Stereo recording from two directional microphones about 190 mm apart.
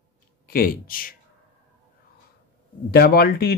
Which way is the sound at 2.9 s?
55° left (ahead or behind).